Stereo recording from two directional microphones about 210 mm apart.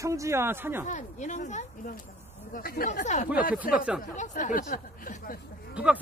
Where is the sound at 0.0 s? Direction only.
15° right (ahead or behind).